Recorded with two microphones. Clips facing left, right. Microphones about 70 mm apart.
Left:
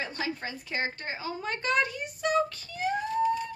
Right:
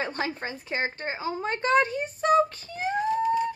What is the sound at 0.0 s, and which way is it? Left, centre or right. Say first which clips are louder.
A woman's voice: right 3 dB; right.